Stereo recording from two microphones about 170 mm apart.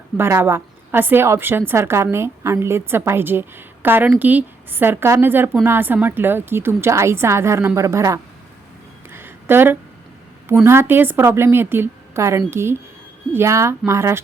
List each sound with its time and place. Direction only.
0.2 s a woman's voice: 15° right (ahead or behind)
9.0 s a sound: 15° right (ahead or behind)
10.6 s a woman's voice: 15° right (ahead or behind)